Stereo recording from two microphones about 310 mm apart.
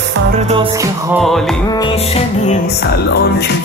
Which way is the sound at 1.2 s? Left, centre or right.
Centre.